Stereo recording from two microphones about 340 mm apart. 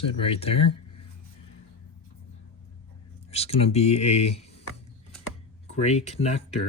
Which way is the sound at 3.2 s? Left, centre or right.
Centre.